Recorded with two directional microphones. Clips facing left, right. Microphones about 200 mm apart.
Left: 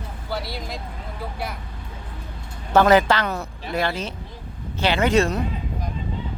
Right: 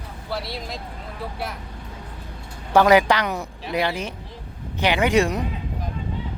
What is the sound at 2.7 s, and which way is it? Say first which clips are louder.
A woman's voice: even; 15° right (ahead or behind).